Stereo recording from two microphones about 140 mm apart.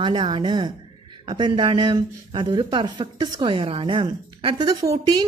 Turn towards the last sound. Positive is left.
turn(degrees=-25)  # may be behind; listen again after turning